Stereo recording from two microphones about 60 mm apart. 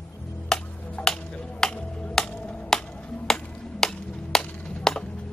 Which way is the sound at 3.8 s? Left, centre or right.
Centre.